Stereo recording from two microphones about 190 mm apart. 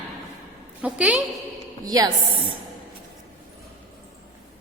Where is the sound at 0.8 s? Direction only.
5° right (ahead or behind).